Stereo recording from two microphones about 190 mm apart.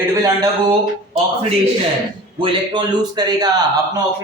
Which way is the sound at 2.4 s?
25° right (ahead or behind).